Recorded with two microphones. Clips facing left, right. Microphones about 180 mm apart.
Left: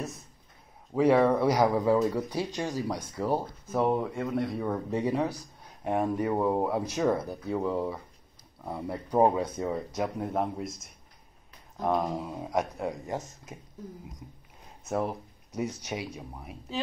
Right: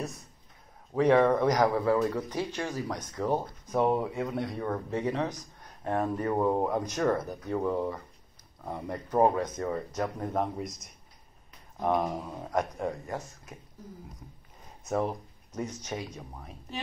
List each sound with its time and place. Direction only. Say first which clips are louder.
0.9 s speech: even; 10° left (ahead or behind)
4.6 s speech: left 2 dB; 10° left (ahead or behind)
13.0 s speech: left 2 dB; 20° left (ahead or behind)